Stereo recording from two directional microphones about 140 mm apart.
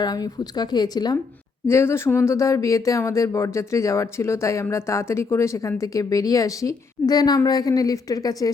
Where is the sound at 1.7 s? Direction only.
20° left (ahead or behind).